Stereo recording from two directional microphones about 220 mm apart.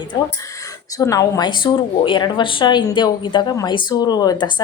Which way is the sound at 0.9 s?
15° left (ahead or behind).